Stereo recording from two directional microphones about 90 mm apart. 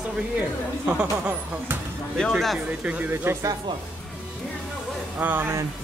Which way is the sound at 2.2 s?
Centre (ahead or behind).